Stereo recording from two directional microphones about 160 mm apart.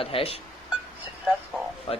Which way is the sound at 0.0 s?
35° left (ahead or behind).